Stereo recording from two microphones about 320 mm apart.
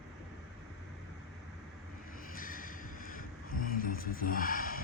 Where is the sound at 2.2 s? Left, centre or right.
Left.